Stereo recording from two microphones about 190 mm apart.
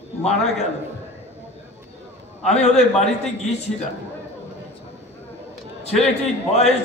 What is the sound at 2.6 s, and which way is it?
Speech, 35° left (ahead or behind).